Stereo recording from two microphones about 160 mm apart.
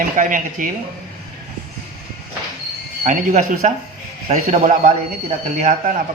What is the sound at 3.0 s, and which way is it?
Speech, 55° right (ahead or behind).